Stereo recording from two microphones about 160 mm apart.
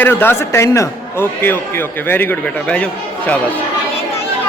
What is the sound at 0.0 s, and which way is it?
A man's voice, 15° left (ahead or behind).